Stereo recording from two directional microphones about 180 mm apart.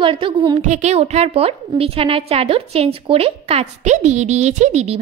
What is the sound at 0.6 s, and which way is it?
A woman's voice, 40° right (ahead or behind).